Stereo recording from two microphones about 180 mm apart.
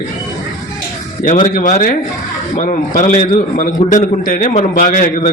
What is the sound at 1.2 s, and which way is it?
A man's voice, 45° left (ahead or behind).